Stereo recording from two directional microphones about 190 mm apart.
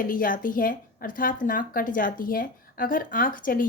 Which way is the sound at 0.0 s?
45° left (ahead or behind).